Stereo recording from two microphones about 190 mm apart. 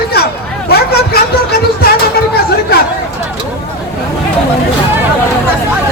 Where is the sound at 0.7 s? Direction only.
55° left (ahead or behind).